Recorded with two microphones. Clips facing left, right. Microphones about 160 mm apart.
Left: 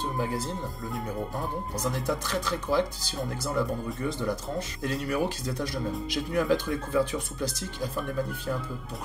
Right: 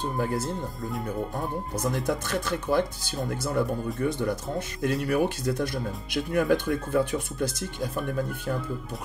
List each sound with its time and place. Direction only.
2.0 s speech: 55° right (ahead or behind)